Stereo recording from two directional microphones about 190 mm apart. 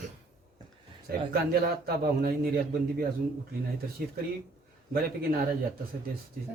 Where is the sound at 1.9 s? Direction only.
50° right (ahead or behind).